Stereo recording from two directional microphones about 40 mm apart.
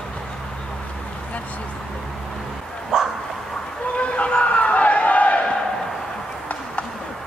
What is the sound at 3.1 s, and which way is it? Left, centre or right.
Bow-wow, centre.